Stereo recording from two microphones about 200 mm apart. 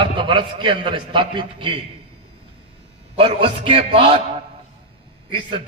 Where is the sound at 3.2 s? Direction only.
25° right (ahead or behind).